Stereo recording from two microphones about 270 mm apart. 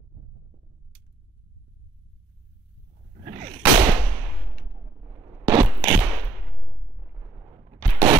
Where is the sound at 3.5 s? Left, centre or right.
Centre.